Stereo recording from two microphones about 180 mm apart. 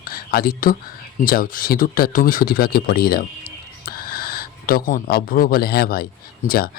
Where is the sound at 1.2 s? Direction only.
55° left (ahead or behind).